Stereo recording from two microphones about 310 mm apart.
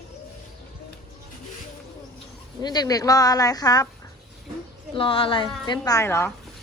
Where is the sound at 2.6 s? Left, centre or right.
Centre.